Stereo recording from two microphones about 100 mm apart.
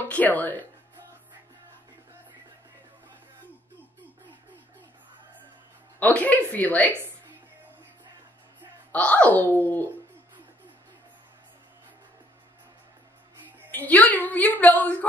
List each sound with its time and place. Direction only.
0.1 s a woman's voice: 15° left (ahead or behind)
5.9 s a woman's voice: 15° left (ahead or behind)
8.9 s a woman's voice: 15° left (ahead or behind)
9.6 s a sound: 20° left (ahead or behind)
13.7 s a woman's voice: 15° left (ahead or behind)